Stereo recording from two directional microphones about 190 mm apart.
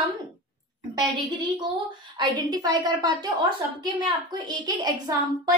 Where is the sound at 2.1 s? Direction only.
20° right (ahead or behind).